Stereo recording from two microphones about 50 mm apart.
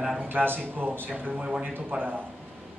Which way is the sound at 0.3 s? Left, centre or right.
Right.